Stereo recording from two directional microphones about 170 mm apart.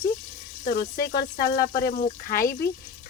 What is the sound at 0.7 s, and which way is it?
Speech, 60° left (ahead or behind).